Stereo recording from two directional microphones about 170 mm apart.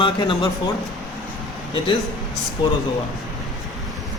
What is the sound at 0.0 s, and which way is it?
Speech, 30° left (ahead or behind).